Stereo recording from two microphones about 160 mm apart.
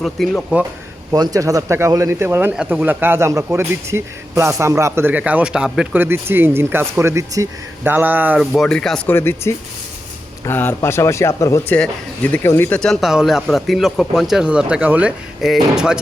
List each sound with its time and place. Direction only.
0.0 s speech: centre (ahead or behind)
1.1 s speech: 25° right (ahead or behind); by 9.1 s 5° left (ahead or behind)
9.1 s speech: 15° left (ahead or behind); by 16.0 s 5° right (ahead or behind)